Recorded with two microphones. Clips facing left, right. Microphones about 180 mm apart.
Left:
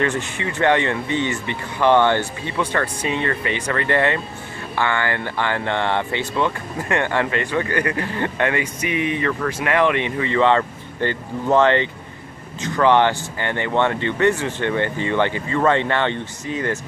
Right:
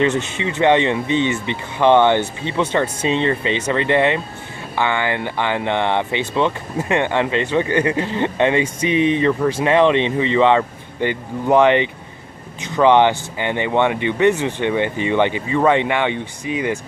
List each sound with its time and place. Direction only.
0.0 s speech: 20° right (ahead or behind)